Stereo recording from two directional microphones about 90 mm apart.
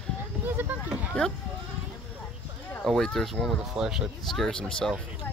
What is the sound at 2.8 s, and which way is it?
Speech, 5° left (ahead or behind).